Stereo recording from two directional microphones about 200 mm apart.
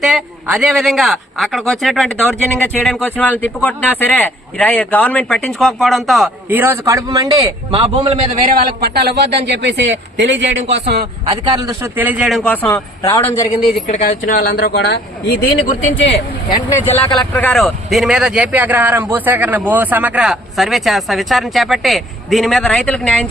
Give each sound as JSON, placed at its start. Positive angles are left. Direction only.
{"t": 0.0, "sound": "a man's voice", "side_deg": -5}
{"t": 8.4, "sound": "a man's voice", "side_deg": -50}
{"t": 11.3, "sound": "a man's voice", "side_deg": -20}
{"t": 12.6, "sound": "a man's voice", "side_deg": 15}
{"t": 13.8, "sound": "speech", "side_deg": 35}
{"t": 17.3, "sound": "a man's voice", "side_deg": 5}